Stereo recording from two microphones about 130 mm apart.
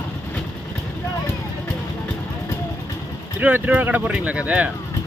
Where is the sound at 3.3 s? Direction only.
15° right (ahead or behind).